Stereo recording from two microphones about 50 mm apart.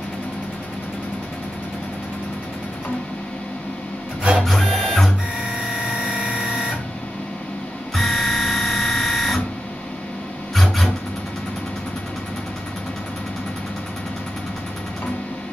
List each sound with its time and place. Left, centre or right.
4.4 s printer: centre
6.0 s music: right
7.9 s printer: centre
10.5 s a sound: centre